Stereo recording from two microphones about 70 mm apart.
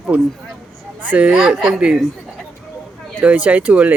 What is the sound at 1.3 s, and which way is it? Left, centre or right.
Speech, centre.